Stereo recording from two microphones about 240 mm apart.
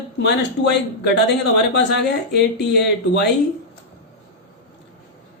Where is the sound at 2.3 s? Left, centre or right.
Left.